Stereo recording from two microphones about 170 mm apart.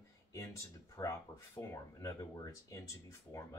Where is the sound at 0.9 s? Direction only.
15° left (ahead or behind).